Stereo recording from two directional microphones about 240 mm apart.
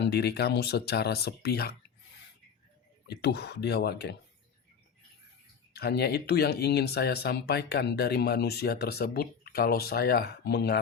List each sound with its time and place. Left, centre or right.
0.0 s speech: left
3.1 s speech: left
5.7 s speech: left